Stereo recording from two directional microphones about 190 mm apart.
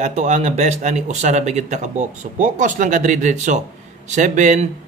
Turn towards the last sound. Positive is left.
turn(degrees=-40)  # may be behind; listen again after turning